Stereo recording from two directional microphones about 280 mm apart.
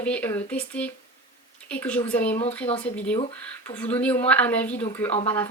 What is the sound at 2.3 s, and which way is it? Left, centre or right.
Speech, left.